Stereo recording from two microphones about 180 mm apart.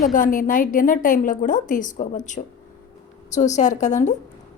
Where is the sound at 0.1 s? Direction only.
50° left (ahead or behind).